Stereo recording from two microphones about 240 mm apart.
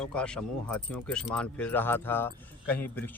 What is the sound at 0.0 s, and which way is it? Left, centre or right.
Speech, centre.